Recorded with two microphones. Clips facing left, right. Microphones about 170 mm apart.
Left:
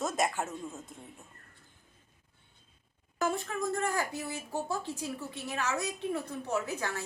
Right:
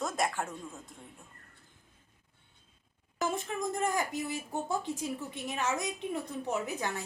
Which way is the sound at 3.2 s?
15° right (ahead or behind).